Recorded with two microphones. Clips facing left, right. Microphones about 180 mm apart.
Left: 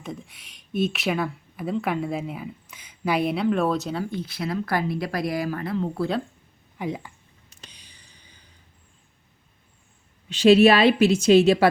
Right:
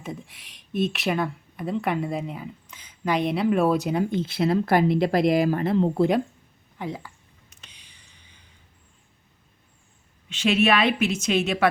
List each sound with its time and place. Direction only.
0.0 s speech: centre (ahead or behind)
3.4 s speech: 10° right (ahead or behind); by 6.1 s 25° right (ahead or behind)
6.7 s speech: 15° left (ahead or behind)
7.5 s a sound: 35° left (ahead or behind)
10.2 s a woman's voice: 35° left (ahead or behind)